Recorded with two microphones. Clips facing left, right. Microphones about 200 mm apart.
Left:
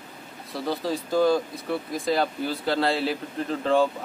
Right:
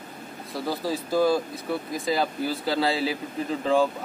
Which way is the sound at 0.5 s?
5° right (ahead or behind).